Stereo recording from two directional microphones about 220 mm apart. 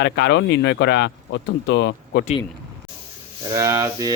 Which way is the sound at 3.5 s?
15° right (ahead or behind).